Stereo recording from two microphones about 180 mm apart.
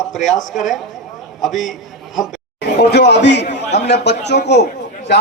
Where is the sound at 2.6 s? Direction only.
70° left (ahead or behind).